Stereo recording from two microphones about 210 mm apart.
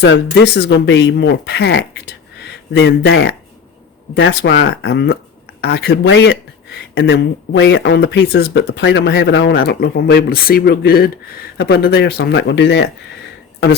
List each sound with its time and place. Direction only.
0.0 s speech: 55° left (ahead or behind)